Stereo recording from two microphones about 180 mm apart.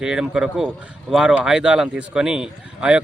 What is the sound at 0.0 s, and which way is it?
Speech, 5° right (ahead or behind).